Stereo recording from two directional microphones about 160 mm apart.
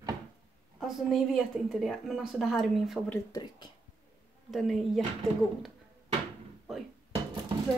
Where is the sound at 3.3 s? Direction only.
25° left (ahead or behind).